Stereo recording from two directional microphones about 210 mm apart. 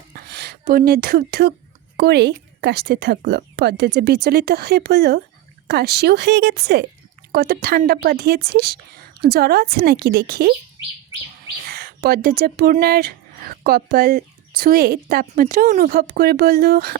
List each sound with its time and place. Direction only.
0.3 s a sound: 50° right (ahead or behind)
0.7 s speech: 45° right (ahead or behind)
11.6 s speech: 45° right (ahead or behind)